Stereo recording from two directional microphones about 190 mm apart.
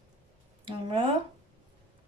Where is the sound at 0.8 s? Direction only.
25° right (ahead or behind).